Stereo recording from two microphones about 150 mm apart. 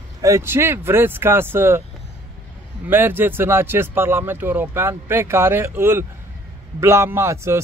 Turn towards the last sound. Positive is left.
turn(degrees=-15)  # may be behind; listen again after turning